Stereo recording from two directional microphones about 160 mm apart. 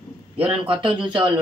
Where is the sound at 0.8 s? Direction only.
30° right (ahead or behind).